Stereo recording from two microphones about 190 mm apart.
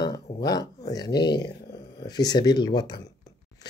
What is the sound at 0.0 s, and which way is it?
Speech, 20° left (ahead or behind).